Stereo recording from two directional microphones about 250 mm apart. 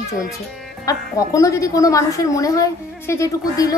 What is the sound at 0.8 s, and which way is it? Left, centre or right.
A woman's voice, centre.